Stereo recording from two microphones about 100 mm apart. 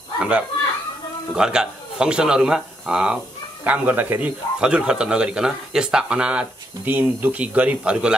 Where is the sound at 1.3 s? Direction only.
5° right (ahead or behind).